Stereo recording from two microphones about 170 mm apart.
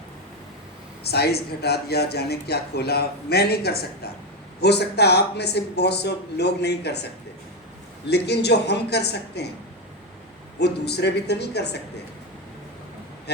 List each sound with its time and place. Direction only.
1.0 s speech: 70° left (ahead or behind)
4.6 s speech: 75° left (ahead or behind)
8.1 s speech: 75° left (ahead or behind)
10.6 s speech: 75° left (ahead or behind)